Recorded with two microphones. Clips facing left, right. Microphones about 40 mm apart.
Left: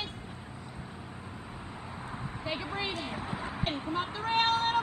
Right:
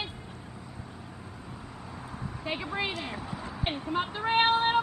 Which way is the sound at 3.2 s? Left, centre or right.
Left.